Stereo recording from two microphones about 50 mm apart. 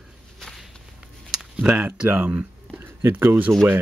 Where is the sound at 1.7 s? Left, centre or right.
Right.